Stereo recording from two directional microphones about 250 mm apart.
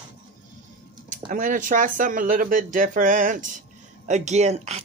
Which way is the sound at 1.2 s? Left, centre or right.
Right.